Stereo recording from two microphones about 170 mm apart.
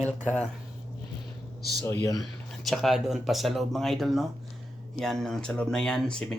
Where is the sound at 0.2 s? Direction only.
10° left (ahead or behind).